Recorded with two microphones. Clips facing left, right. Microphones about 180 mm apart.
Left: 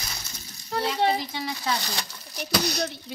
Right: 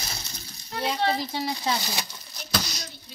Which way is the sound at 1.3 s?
35° right (ahead or behind).